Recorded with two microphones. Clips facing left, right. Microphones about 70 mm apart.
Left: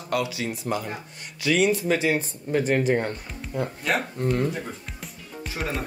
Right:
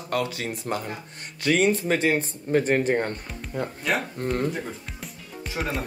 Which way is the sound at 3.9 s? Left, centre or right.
Centre.